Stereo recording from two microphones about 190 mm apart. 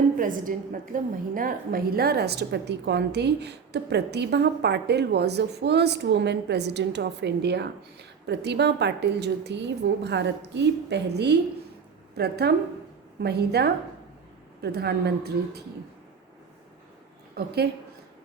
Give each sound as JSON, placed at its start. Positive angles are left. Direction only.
{"t": 0.2, "sound": "a woman's voice", "side_deg": -45}
{"t": 17.3, "sound": "a woman's voice", "side_deg": -55}